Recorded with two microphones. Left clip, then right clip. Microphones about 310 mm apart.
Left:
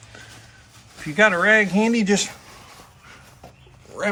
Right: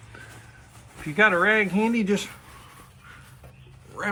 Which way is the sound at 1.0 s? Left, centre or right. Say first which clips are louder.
Left 2 dB; centre.